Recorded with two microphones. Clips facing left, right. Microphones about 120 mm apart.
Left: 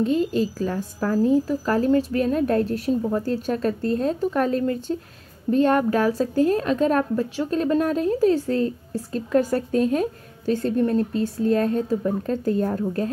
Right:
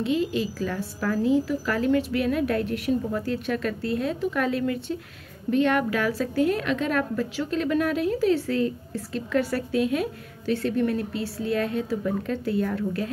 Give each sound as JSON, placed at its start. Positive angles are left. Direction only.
{"t": 0.0, "sound": "a woman's voice", "side_deg": 40}
{"t": 0.7, "sound": "a woman's voice", "side_deg": 25}
{"t": 11.9, "sound": "a woman's voice", "side_deg": 20}
{"t": 12.3, "sound": "a woman's voice", "side_deg": 35}